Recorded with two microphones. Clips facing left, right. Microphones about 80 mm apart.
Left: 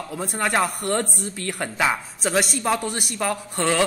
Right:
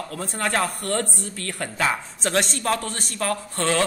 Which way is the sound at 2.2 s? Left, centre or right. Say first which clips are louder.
Left 1 dB; centre.